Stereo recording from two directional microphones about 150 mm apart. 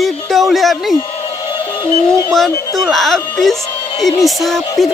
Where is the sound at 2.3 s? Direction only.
Centre (ahead or behind).